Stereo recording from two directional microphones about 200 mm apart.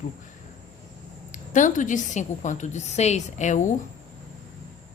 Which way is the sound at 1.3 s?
40° left (ahead or behind).